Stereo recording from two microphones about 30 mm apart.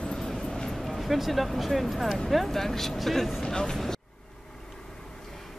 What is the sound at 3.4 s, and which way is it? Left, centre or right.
Speech, left.